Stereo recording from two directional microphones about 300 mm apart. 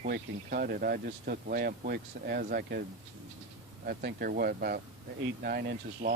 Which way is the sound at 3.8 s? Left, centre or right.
Right.